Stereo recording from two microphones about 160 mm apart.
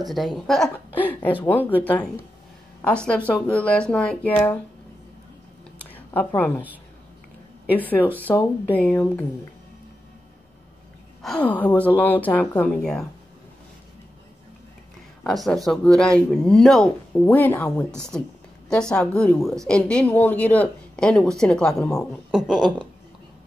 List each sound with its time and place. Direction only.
0.0 s a woman's voice: centre (ahead or behind)
5.9 s a sound: 10° left (ahead or behind)
7.7 s speech: 10° left (ahead or behind)
8.3 s speech: 25° left (ahead or behind)
8.6 s speech: 10° left (ahead or behind)
11.2 s speech: 10° left (ahead or behind)
15.2 s a woman's voice: centre (ahead or behind)